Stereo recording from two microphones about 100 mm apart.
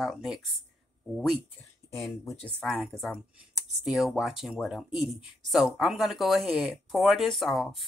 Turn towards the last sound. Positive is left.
turn(degrees=0)  # may be behind; listen again after turning